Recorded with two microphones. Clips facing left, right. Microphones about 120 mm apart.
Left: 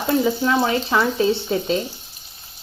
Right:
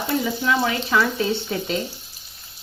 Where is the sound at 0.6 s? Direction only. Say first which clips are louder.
Left 2 dB; 25° left (ahead or behind).